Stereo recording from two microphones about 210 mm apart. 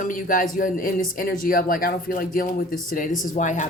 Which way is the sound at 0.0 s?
40° left (ahead or behind).